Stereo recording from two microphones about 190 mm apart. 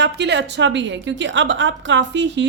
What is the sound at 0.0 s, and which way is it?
A woman's voice, 65° right (ahead or behind).